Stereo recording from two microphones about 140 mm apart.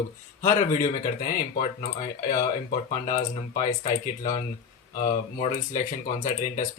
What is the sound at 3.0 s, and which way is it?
Speech, 60° left (ahead or behind).